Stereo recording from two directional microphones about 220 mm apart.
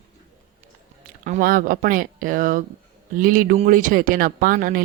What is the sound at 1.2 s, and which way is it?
Speech, 40° right (ahead or behind).